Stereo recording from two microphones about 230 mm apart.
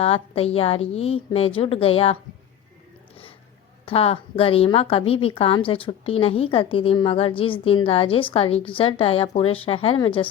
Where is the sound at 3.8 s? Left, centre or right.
Left.